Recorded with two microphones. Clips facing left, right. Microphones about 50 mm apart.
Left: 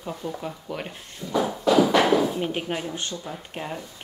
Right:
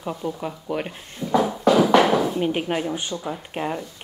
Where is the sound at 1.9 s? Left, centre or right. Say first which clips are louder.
Right 3 dB; right.